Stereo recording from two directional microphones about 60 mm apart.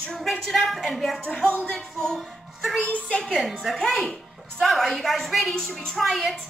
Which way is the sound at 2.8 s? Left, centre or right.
Left.